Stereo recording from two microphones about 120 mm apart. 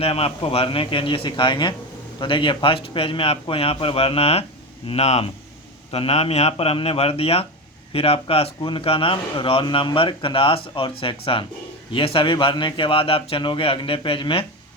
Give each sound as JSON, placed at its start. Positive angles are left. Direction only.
{"t": 0.0, "sound": "a man's voice", "side_deg": 55}